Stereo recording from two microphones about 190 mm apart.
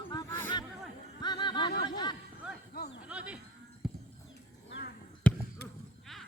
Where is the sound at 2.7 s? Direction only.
55° left (ahead or behind).